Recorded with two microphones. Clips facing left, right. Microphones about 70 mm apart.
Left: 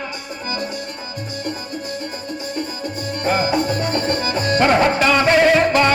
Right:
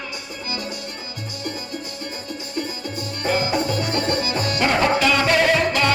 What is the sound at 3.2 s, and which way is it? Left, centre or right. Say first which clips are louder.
Music: left 3 dB; left.